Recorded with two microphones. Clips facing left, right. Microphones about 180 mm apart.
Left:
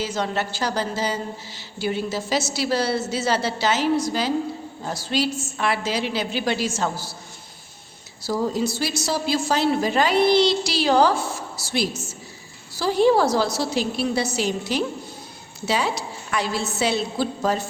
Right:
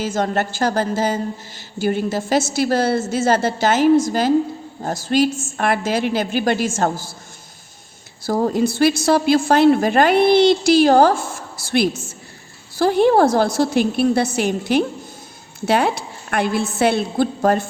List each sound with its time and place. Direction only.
0.0 s a woman's voice: 50° right (ahead or behind)
8.2 s a woman's voice: 50° right (ahead or behind)